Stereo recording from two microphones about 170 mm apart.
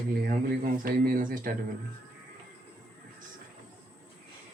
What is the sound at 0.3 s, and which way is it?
Speech, 55° right (ahead or behind).